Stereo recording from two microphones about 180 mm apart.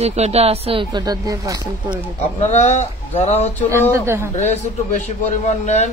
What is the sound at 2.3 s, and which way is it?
Speech, 40° left (ahead or behind).